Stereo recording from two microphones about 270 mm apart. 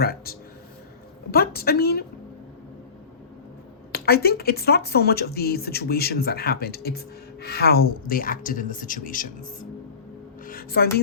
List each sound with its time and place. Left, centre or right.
0.0 s speech: left
3.9 s a woman's voice: left